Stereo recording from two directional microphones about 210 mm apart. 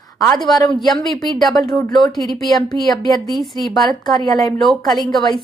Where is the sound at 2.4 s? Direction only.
20° left (ahead or behind).